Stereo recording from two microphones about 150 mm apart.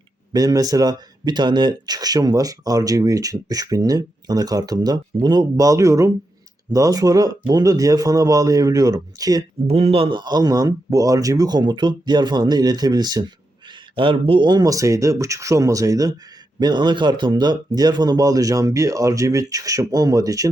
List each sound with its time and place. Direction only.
0.3 s speech: 25° right (ahead or behind)
9.6 s speech: 40° right (ahead or behind); by 20.5 s 25° right (ahead or behind)